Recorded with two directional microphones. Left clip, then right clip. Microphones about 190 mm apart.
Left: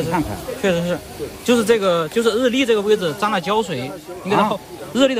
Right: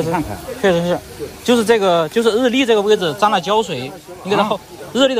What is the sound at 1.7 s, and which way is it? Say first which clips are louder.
Speech: right 3 dB; 30° left (ahead or behind).